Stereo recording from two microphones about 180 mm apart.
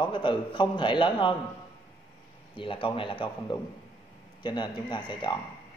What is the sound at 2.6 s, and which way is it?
Speech, 30° left (ahead or behind).